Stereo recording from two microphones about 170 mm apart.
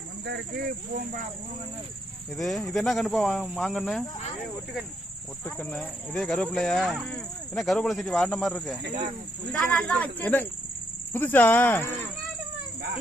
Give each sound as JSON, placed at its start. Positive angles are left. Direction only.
{"t": 0.3, "sound": "speech", "side_deg": -70}
{"t": 2.3, "sound": "speech", "side_deg": 0}
{"t": 5.5, "sound": "speech", "side_deg": 10}